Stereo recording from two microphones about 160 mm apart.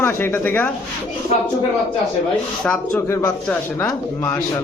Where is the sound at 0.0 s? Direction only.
15° left (ahead or behind).